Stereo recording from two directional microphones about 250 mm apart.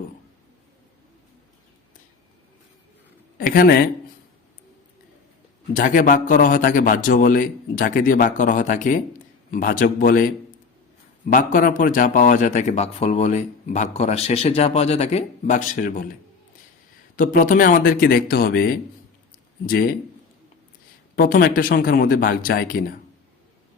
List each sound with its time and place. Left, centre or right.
3.3 s a man's voice: left
5.7 s a man's voice: left
11.3 s a man's voice: left
17.2 s a man's voice: left
21.2 s a man's voice: left